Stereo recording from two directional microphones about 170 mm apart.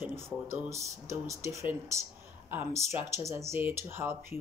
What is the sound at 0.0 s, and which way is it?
Speech, 15° right (ahead or behind).